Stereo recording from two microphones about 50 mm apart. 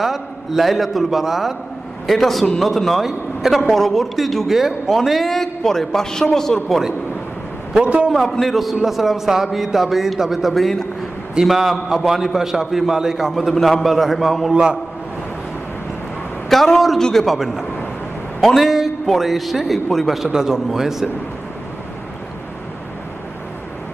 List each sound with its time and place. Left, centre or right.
0.0 s a man's voice: centre
7.7 s a man's voice: right
8.3 s a man's voice: centre
11.4 s a man's voice: centre
13.3 s a man's voice: centre
14.5 s a man's voice: centre
16.4 s a man's voice: centre
18.4 s a man's voice: centre